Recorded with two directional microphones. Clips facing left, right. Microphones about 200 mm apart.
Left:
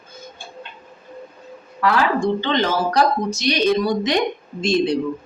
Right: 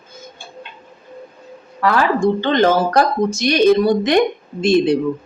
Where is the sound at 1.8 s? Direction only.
50° right (ahead or behind).